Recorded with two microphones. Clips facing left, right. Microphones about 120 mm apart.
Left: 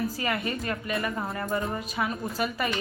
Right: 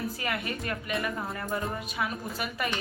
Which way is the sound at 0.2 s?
Centre (ahead or behind).